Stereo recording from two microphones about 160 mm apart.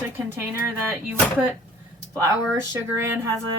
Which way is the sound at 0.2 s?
10° right (ahead or behind).